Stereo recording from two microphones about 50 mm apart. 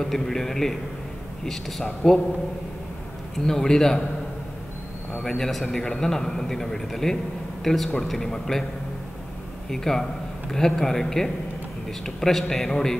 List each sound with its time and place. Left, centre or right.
0.0 s a man's voice: centre
3.3 s a man's voice: centre
5.2 s a man's voice: centre
9.7 s a man's voice: centre